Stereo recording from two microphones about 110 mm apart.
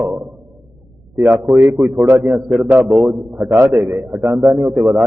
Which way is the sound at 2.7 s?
15° right (ahead or behind).